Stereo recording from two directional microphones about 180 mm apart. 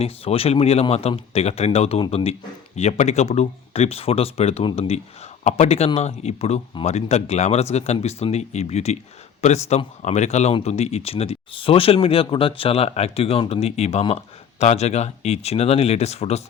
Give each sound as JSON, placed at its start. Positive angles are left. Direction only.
{"t": 0.0, "sound": "speech", "side_deg": 35}